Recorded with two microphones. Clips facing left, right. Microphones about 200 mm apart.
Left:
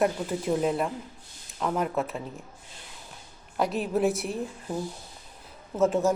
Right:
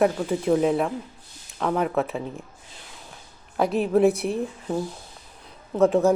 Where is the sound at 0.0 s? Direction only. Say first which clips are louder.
Right 4 dB; 55° right (ahead or behind).